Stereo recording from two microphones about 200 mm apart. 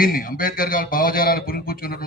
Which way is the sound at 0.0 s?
45° left (ahead or behind).